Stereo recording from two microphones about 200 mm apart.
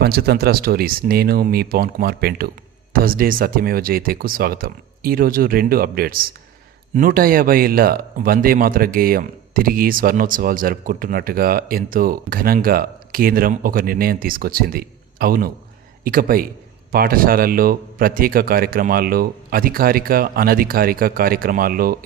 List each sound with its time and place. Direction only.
0.0 s speech: 50° right (ahead or behind)